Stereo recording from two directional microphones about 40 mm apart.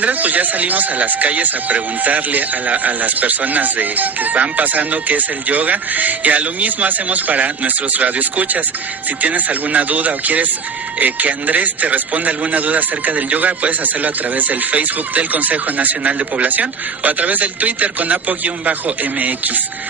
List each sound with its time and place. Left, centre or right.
0.0 s a man's voice: right